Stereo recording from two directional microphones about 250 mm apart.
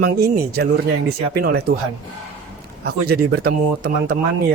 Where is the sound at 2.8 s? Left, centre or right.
Right.